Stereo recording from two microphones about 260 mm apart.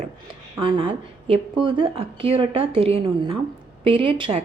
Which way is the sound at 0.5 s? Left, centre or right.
Centre.